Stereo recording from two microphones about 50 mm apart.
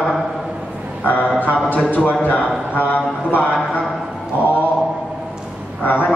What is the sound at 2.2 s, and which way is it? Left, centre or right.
A man's voice, left.